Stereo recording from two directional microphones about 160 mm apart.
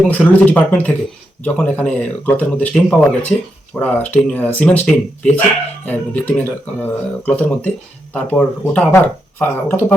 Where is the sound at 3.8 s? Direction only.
10° left (ahead or behind).